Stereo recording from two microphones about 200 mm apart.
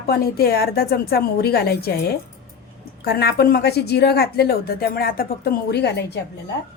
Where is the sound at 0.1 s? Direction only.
50° left (ahead or behind).